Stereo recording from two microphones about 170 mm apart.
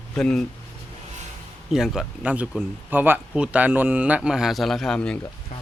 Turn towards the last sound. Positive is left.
turn(degrees=5)  # may be behind; listen again after turning